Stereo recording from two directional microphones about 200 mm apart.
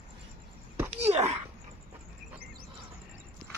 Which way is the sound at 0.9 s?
30° right (ahead or behind).